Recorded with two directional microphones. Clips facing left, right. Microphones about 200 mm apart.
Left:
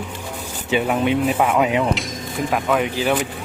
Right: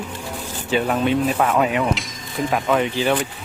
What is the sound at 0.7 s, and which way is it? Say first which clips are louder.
Speech: even; 15° left (ahead or behind).